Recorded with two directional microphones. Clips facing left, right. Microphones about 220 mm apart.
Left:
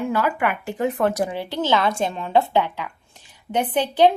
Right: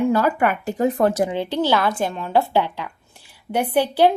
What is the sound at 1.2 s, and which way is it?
Speech, 20° right (ahead or behind).